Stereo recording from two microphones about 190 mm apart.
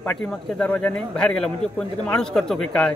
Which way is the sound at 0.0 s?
5° left (ahead or behind).